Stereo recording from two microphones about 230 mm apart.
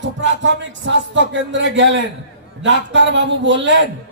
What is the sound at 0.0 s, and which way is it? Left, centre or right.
A man's voice, right.